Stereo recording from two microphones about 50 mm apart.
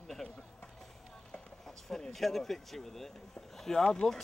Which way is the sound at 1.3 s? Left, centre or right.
Centre.